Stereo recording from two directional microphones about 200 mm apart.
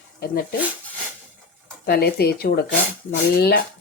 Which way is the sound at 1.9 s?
55° left (ahead or behind).